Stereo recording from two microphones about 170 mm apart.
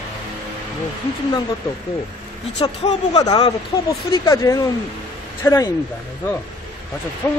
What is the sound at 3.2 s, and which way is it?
Speech, 25° left (ahead or behind).